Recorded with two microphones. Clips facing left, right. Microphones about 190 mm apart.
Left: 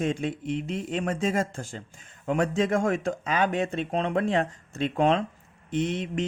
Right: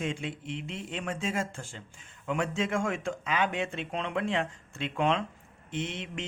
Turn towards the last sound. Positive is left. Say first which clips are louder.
# left 8 dB
turn(degrees=40)  # may be behind; listen again after turning